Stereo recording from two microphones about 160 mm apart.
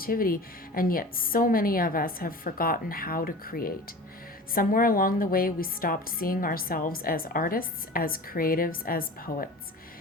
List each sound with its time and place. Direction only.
0.0 s a woman's voice: 65° left (ahead or behind)